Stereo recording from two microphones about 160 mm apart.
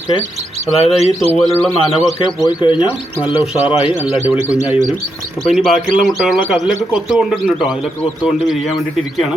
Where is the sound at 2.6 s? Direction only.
30° left (ahead or behind).